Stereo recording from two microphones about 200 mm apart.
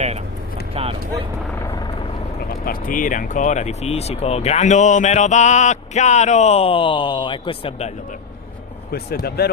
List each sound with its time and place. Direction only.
0.7 s a sound: 30° right (ahead or behind)
2.6 s speech: 45° left (ahead or behind); by 7.9 s 25° left (ahead or behind)
8.9 s speech: 50° left (ahead or behind)